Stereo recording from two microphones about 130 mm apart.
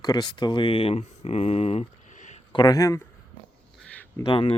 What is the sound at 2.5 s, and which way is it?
Speech, 30° left (ahead or behind).